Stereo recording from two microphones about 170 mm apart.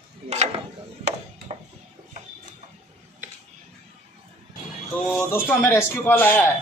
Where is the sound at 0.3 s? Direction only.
40° right (ahead or behind).